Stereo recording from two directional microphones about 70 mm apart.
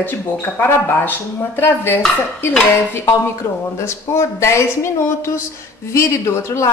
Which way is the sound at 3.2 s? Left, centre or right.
Left.